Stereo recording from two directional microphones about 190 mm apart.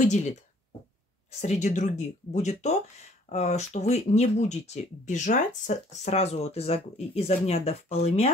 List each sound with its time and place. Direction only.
0.0 s speech: 40° left (ahead or behind)
1.4 s speech: 40° left (ahead or behind)